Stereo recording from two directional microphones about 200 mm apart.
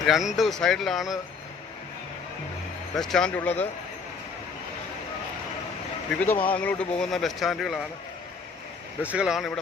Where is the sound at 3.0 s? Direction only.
5° left (ahead or behind).